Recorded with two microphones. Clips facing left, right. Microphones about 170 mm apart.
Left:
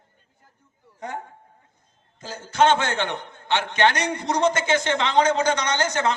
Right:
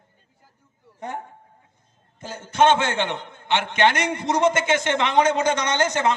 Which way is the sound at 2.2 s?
25° right (ahead or behind).